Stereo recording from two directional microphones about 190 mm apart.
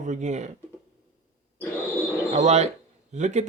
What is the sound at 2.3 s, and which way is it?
Speech, 35° right (ahead or behind).